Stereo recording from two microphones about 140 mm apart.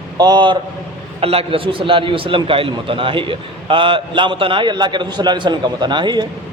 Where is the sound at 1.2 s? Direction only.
45° right (ahead or behind).